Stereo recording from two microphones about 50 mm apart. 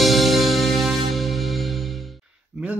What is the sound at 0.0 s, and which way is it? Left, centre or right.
Music, centre.